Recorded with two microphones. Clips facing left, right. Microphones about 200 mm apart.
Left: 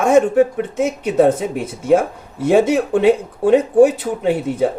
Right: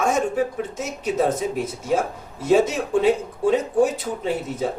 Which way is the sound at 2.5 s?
60° left (ahead or behind).